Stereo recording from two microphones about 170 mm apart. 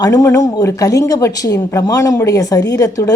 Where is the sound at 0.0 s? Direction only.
20° left (ahead or behind).